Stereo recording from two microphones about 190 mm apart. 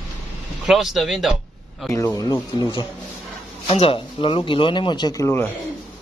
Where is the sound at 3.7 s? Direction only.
30° left (ahead or behind); by 5.4 s 15° left (ahead or behind).